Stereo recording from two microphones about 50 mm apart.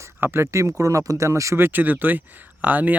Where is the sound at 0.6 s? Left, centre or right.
Right.